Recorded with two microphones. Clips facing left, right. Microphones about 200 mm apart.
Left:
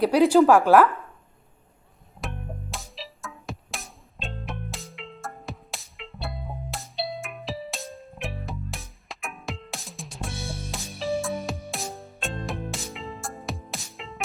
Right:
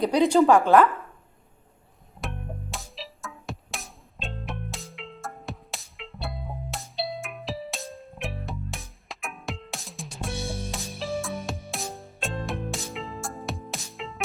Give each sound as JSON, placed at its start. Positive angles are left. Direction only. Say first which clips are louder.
{"t": 0.0, "sound": "speech", "louder": "left 2 dB", "side_deg": 5}
{"t": 2.2, "sound": "music", "louder": "even", "side_deg": 0}